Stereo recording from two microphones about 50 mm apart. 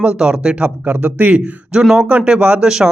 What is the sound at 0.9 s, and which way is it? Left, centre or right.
Speech, right.